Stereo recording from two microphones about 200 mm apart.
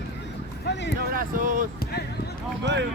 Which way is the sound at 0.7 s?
60° left (ahead or behind).